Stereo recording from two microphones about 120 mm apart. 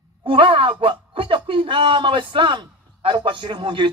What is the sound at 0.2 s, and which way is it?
A man's voice, 45° right (ahead or behind).